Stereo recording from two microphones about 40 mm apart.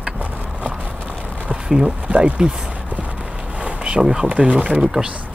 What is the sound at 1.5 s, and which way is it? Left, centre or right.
Speech, right.